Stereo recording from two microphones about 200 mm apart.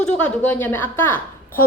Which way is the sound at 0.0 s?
5° left (ahead or behind).